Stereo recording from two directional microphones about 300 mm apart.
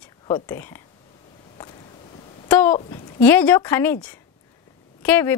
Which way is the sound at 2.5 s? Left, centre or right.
Centre.